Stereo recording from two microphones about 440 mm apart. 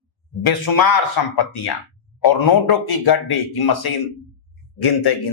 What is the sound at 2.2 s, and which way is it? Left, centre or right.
A man's voice, left.